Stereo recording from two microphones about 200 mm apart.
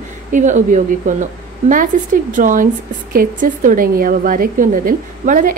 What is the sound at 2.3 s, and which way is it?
A woman's voice, 40° right (ahead or behind).